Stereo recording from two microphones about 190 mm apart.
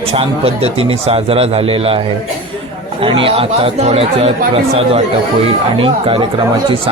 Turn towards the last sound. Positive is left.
turn(degrees=-25)  # may be behind; listen again after turning